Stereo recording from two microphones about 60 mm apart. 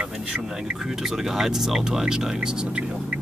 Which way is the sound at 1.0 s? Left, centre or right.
Centre.